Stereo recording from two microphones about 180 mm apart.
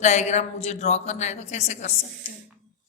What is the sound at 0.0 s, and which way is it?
A woman's voice, 40° left (ahead or behind).